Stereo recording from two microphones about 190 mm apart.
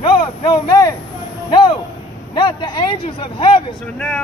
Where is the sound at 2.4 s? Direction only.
25° left (ahead or behind).